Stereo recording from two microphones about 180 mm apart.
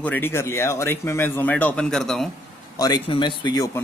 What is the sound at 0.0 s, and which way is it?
Speech, 10° left (ahead or behind).